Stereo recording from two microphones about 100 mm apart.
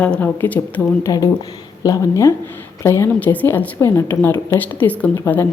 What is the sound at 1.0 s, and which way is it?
A woman's voice, 30° left (ahead or behind).